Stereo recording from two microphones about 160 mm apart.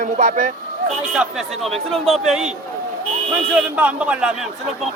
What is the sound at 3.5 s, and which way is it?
Speech, 10° right (ahead or behind).